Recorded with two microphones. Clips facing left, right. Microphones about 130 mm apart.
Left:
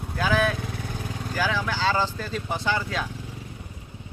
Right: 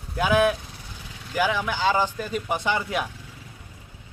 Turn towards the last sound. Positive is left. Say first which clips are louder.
# right 1 dB
turn(degrees=-20)  # may be behind; listen again after turning